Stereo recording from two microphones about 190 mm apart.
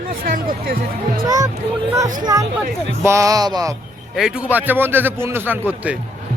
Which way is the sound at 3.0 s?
15° right (ahead or behind).